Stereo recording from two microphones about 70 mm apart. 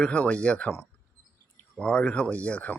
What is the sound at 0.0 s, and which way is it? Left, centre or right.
Speech, centre.